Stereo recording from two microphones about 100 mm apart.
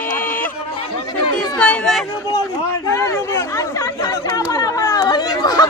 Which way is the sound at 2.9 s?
30° left (ahead or behind).